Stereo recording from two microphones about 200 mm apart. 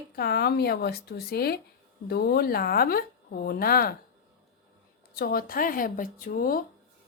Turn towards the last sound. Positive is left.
turn(degrees=45)  # may be behind; listen again after turning